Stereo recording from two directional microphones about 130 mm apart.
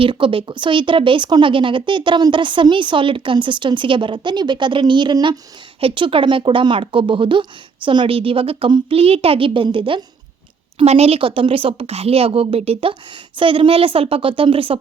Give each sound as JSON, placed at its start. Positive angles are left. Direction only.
{"t": 0.0, "sound": "a woman's voice", "side_deg": -40}
{"t": 10.8, "sound": "a woman's voice", "side_deg": -55}